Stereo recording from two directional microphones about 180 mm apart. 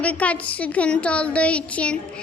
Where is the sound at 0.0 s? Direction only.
10° left (ahead or behind).